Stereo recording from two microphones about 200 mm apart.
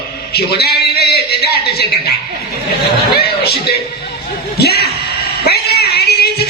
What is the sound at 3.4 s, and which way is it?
Speech, 50° left (ahead or behind).